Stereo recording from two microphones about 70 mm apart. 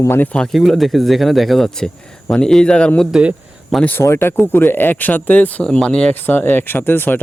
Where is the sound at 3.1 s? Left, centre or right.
Centre.